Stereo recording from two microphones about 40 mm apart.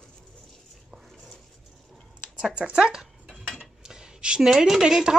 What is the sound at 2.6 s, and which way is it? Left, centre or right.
Speech, centre.